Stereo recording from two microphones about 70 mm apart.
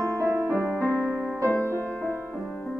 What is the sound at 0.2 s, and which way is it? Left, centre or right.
Music, right.